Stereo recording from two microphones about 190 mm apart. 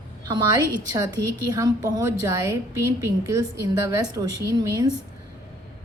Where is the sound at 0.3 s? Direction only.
20° right (ahead or behind).